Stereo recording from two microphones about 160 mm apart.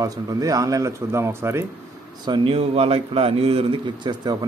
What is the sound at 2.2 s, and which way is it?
Speech, 30° right (ahead or behind).